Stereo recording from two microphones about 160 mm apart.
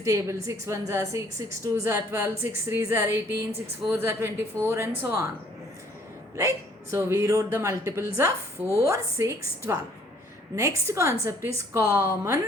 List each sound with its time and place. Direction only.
0.0 s a woman's voice: 20° right (ahead or behind)
6.3 s speech: 20° right (ahead or behind)